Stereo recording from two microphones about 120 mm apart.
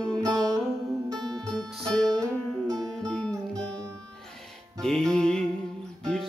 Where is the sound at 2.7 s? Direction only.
5° left (ahead or behind).